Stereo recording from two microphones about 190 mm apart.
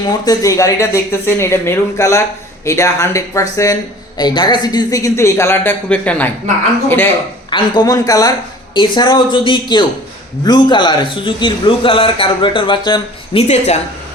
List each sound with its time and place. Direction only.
0.3 s speech: 15° left (ahead or behind)
7.5 s a man's voice: 25° left (ahead or behind)